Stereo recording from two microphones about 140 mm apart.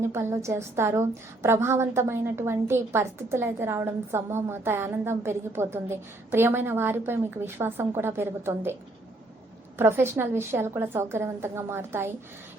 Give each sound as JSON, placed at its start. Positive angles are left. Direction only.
{"t": 0.0, "sound": "a woman's voice", "side_deg": -20}